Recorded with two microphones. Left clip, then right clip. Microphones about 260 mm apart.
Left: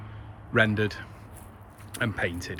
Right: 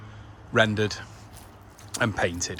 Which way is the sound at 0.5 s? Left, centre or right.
Centre.